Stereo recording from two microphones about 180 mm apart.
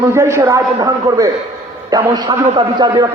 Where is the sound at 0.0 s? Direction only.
15° right (ahead or behind).